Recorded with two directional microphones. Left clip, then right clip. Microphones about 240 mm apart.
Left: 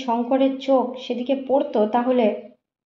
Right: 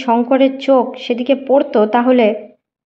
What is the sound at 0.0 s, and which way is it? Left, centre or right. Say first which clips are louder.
A woman's voice: right 8 dB; right.